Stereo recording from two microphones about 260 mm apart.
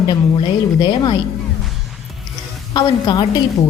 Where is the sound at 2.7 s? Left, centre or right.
Centre.